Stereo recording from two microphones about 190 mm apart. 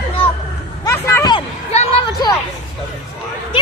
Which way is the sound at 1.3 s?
30° left (ahead or behind).